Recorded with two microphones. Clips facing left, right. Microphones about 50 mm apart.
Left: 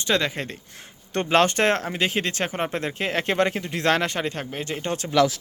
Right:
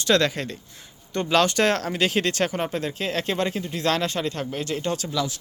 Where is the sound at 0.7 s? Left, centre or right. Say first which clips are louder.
Left 2 dB; left.